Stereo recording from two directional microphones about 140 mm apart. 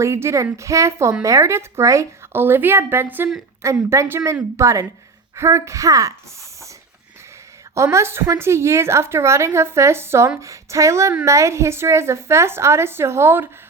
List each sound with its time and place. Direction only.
0.0 s a woman's voice: 20° right (ahead or behind)
7.8 s a woman's voice: 20° right (ahead or behind)